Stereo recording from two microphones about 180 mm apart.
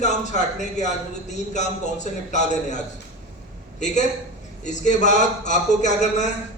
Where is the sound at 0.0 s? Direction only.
40° left (ahead or behind).